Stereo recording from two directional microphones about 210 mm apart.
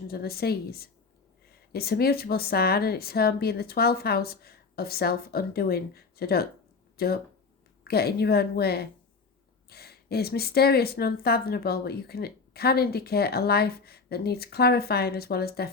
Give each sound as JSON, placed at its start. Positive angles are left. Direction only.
{"t": 0.1, "sound": "speech", "side_deg": 45}